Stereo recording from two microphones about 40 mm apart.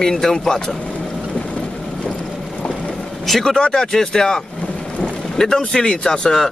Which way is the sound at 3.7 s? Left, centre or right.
Centre.